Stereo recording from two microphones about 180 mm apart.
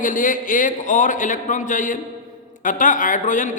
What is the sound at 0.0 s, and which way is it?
A man's voice, 45° left (ahead or behind).